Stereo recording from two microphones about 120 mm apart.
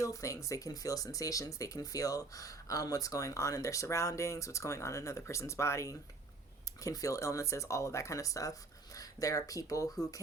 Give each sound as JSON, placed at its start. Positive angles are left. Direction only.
{"t": 0.0, "sound": "speech", "side_deg": 25}